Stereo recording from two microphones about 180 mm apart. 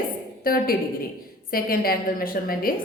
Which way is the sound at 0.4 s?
55° left (ahead or behind).